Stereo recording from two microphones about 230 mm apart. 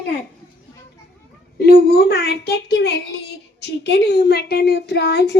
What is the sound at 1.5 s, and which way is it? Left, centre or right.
A woman's voice, left.